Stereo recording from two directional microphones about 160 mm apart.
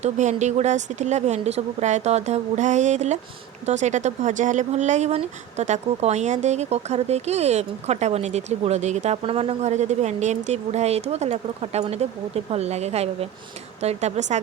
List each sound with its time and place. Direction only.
0.0 s speech: 45° right (ahead or behind)